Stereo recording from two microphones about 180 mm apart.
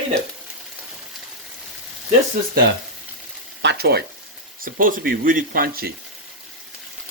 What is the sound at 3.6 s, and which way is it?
Speech, 70° right (ahead or behind).